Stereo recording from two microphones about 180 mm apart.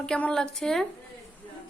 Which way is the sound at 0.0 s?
5° left (ahead or behind).